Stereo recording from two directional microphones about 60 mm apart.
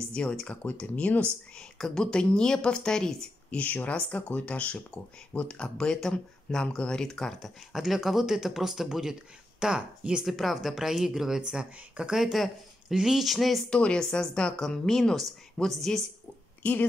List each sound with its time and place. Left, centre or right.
0.1 s speech: centre
3.5 s speech: left; by 7.5 s centre
7.7 s speech: centre
10.2 s speech: centre
13.7 s speech: centre